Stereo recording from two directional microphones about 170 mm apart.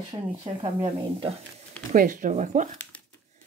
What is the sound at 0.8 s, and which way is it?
Speech, 35° right (ahead or behind).